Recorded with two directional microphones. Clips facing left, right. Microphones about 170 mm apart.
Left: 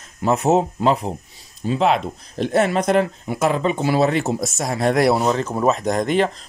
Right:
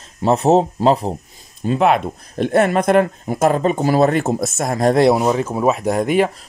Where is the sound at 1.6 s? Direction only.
55° right (ahead or behind).